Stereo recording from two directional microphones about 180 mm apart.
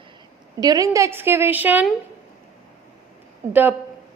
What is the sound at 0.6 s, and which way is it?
A woman's voice, 20° right (ahead or behind).